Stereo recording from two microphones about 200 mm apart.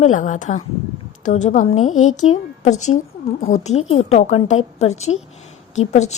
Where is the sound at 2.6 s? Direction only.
35° left (ahead or behind).